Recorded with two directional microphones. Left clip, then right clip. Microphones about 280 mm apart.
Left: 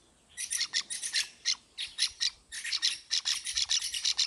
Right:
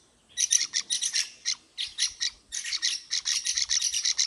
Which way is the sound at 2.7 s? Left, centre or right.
Centre.